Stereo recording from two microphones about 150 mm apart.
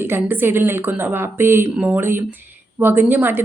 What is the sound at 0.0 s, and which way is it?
Speech, 15° right (ahead or behind).